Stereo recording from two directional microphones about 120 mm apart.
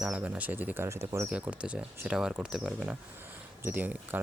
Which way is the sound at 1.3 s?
10° right (ahead or behind).